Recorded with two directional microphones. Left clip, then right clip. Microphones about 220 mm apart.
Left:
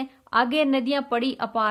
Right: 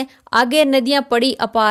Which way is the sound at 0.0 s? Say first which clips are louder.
Right 6 dB; 35° right (ahead or behind).